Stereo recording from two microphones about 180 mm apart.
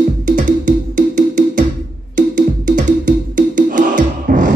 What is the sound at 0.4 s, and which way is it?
Music, 45° right (ahead or behind).